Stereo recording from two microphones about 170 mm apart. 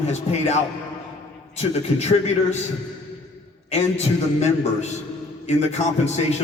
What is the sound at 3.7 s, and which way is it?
A man's voice, 40° left (ahead or behind).